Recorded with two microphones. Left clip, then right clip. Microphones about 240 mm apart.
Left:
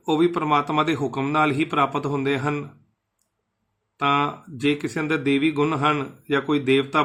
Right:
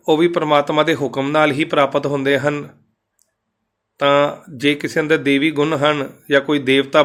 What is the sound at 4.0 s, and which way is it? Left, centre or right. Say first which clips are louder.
Speech: right 7 dB; centre.